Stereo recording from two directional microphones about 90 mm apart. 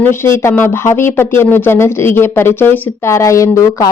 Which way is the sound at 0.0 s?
30° left (ahead or behind).